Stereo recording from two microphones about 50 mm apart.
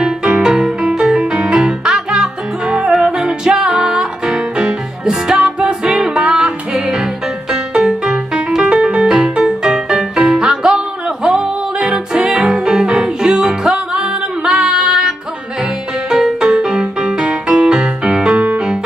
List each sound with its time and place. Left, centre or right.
0.0 s music: centre